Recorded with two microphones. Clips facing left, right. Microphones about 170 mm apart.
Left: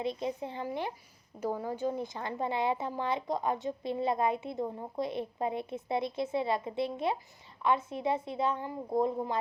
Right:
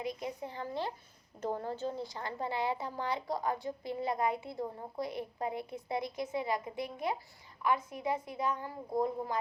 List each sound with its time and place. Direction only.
0.0 s a woman's voice: 25° left (ahead or behind)